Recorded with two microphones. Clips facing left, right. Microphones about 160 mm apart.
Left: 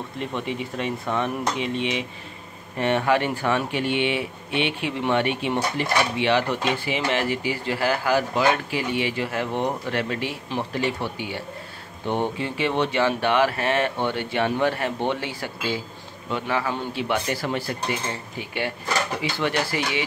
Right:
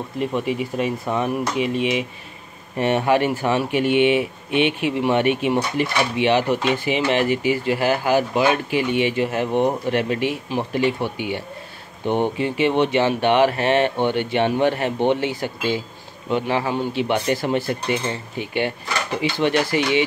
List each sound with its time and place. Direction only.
0.7 s speech: 10° right (ahead or behind)
2.8 s speech: 15° right (ahead or behind)